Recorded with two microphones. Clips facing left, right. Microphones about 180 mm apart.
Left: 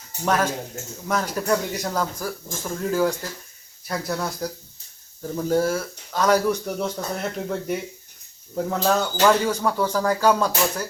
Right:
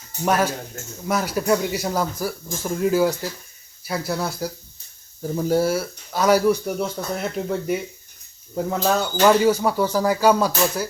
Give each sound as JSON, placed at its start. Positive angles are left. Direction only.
{"t": 0.3, "sound": "speech", "side_deg": -10}